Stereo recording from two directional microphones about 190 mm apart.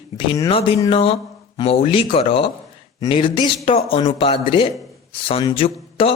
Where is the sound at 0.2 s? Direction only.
25° left (ahead or behind).